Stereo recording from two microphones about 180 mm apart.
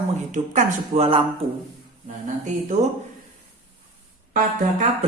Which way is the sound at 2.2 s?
45° right (ahead or behind).